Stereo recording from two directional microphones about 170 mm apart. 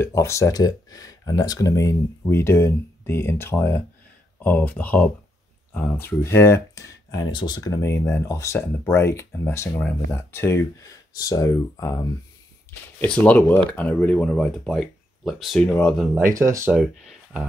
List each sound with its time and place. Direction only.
0.0 s speech: 15° left (ahead or behind)
13.0 s speech: 5° left (ahead or behind)
16.2 s speech: 15° right (ahead or behind)
16.7 s speech: 5° right (ahead or behind)